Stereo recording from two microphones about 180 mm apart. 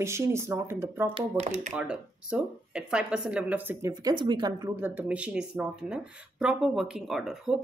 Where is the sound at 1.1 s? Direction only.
40° right (ahead or behind).